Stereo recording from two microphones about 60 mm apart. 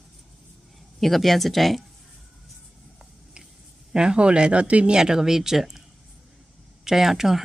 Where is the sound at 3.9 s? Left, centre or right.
Centre.